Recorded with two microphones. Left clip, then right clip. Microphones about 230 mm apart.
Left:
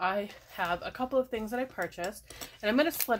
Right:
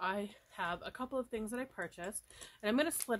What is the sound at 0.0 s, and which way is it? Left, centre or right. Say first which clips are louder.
Speech: left 7 dB; right.